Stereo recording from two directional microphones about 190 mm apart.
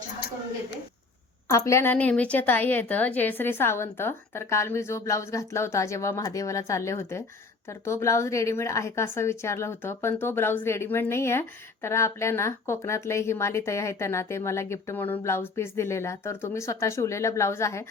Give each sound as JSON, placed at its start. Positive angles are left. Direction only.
{"t": 1.5, "sound": "a woman's voice", "side_deg": 15}